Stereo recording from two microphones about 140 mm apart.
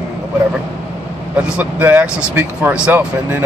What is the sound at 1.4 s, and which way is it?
Speech, 10° right (ahead or behind).